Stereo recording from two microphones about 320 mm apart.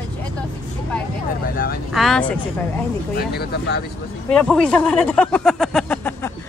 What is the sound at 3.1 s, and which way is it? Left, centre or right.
Speech, left.